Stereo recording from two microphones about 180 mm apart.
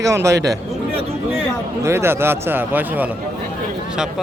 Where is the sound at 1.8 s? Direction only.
15° right (ahead or behind).